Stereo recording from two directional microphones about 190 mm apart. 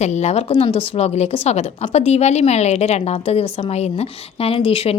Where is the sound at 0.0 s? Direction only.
35° left (ahead or behind).